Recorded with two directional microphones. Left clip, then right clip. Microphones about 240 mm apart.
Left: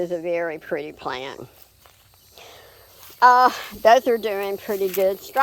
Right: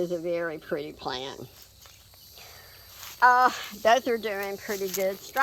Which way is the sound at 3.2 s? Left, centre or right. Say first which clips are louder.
Left 6 dB; left.